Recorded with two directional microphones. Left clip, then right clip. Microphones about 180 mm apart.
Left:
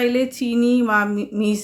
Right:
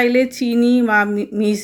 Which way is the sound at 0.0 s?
15° right (ahead or behind).